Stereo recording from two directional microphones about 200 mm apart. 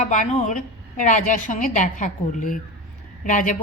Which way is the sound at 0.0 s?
40° left (ahead or behind).